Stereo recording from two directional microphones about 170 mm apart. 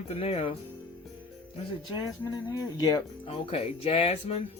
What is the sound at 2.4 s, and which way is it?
Speech, 20° left (ahead or behind).